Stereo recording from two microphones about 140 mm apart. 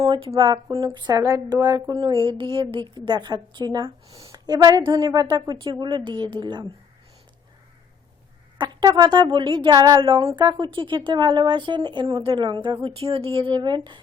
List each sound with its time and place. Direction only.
0.0 s a woman's voice: 30° right (ahead or behind)
2.0 s a woman's voice: 35° right (ahead or behind)
8.5 s a woman's voice: 30° right (ahead or behind)